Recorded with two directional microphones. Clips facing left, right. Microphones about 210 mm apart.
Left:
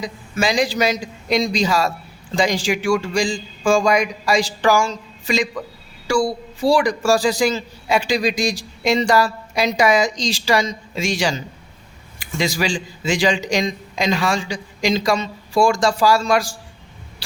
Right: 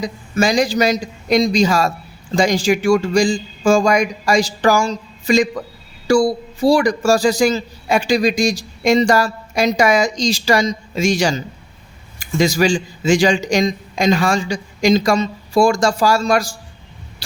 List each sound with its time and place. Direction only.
0.0 s a man's voice: 45° right (ahead or behind)